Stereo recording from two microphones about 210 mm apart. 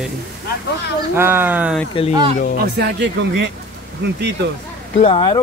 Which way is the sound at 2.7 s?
55° right (ahead or behind).